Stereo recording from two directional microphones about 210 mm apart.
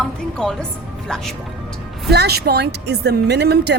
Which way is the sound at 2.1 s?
50° right (ahead or behind).